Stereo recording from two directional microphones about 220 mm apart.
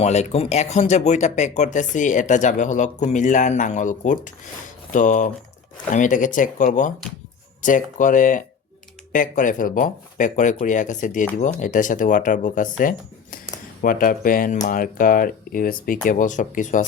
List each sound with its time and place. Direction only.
0.0 s speech: 30° left (ahead or behind)